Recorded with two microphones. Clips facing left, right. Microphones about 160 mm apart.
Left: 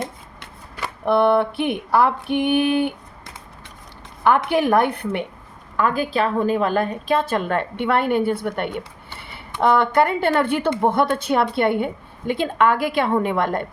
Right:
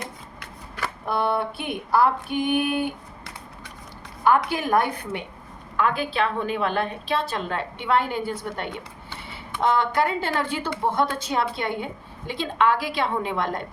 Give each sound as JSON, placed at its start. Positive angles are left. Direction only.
{"t": 0.0, "sound": "shuffling cards", "side_deg": 25}
{"t": 1.0, "sound": "speech", "side_deg": 65}
{"t": 4.4, "sound": "speech", "side_deg": 65}
{"t": 5.7, "sound": "a woman's voice", "side_deg": 40}